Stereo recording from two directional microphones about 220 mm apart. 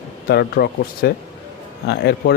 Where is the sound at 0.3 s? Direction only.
45° left (ahead or behind).